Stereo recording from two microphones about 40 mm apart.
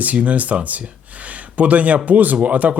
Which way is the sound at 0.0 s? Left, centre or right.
Right.